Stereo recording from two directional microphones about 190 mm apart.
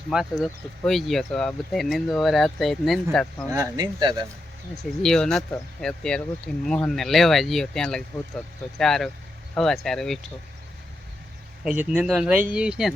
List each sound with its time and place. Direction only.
0.1 s speech: centre (ahead or behind)
3.5 s speech: 20° right (ahead or behind)
5.0 s speech: 5° left (ahead or behind)
11.6 s speech: 5° right (ahead or behind)